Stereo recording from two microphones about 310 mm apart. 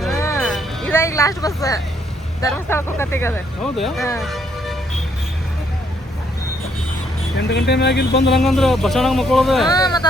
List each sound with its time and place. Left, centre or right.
0.0 s a sound: centre
2.4 s speech: centre
7.5 s speech: left
8.4 s speech: centre
9.6 s speech: centre